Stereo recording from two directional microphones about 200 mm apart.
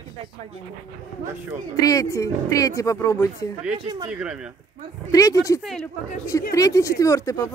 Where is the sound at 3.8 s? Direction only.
25° right (ahead or behind).